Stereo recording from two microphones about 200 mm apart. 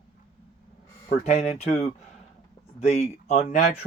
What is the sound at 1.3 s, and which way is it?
Speech, 35° left (ahead or behind).